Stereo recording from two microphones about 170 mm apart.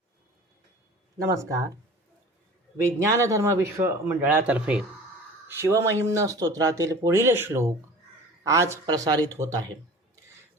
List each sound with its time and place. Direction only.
1.2 s speech: 20° right (ahead or behind)
2.7 s speech: 15° right (ahead or behind)